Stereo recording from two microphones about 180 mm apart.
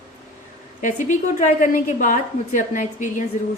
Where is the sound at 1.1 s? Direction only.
45° left (ahead or behind).